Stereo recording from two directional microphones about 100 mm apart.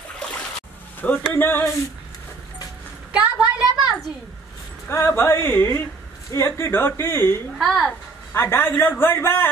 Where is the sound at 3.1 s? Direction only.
10° right (ahead or behind).